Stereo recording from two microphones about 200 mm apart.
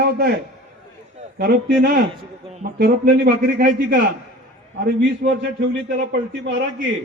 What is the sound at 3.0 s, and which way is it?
A man's voice, 55° right (ahead or behind).